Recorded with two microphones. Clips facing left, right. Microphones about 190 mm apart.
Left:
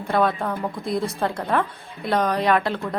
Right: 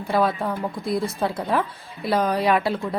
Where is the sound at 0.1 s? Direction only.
5° right (ahead or behind).